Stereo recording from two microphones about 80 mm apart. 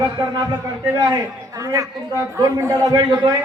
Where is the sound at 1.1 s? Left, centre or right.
Right.